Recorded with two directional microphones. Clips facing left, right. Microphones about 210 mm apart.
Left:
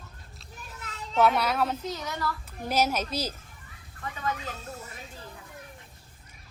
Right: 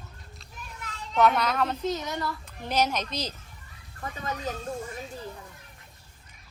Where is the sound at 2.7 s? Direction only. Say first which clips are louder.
Even; 5° left (ahead or behind).